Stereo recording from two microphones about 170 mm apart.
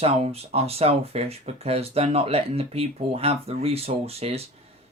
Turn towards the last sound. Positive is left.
turn(degrees=-35)  # may be behind; listen again after turning